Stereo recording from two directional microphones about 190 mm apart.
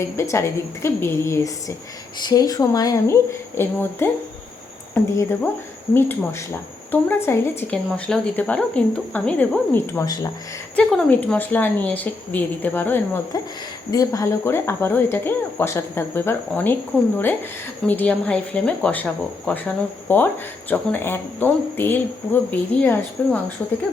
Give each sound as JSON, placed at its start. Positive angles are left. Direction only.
{"t": 0.0, "sound": "speech", "side_deg": 15}
{"t": 17.8, "sound": "speech", "side_deg": 5}